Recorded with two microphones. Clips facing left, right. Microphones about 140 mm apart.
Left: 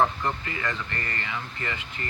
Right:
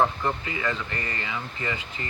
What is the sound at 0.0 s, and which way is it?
Speech, 10° right (ahead or behind).